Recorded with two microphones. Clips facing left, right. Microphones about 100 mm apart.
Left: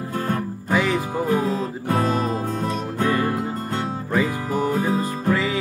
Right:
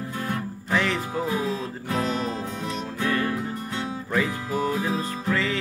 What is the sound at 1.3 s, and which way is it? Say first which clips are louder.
Music: left 5 dB; 50° left (ahead or behind).